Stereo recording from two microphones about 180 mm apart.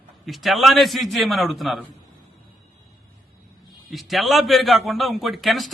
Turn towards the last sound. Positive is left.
turn(degrees=0)  # may be behind; listen again after turning